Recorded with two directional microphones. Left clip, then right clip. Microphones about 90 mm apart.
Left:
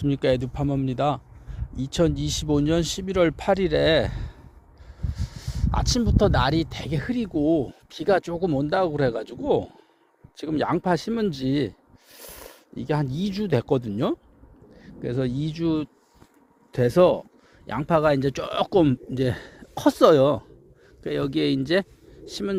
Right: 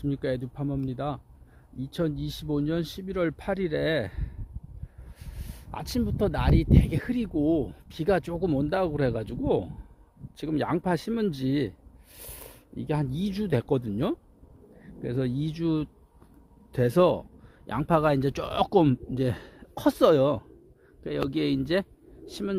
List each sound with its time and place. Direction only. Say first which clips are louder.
0.0 s speech: left 7 dB; 10° left (ahead or behind)
3.8 s speech: left 7 dB; 20° right (ahead or behind)
5.1 s speech: left 8 dB; 35° right (ahead or behind)
12.1 s a sound: left 4 dB; 30° right (ahead or behind)
13.1 s speech: left 4 dB; 45° right (ahead or behind)
17.7 s speech: left 3 dB; 60° right (ahead or behind)
19.1 s speech: left 4 dB; 20° right (ahead or behind)